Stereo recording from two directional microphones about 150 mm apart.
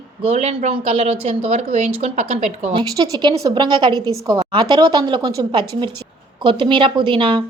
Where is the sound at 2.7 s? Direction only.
25° right (ahead or behind).